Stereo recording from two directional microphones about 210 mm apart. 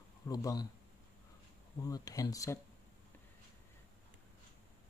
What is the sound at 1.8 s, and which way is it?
Speech, 15° left (ahead or behind).